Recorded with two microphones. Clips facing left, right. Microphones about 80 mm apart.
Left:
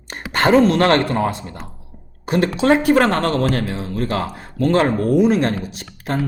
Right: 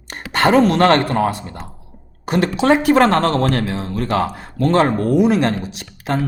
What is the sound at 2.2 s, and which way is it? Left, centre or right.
Speech, right.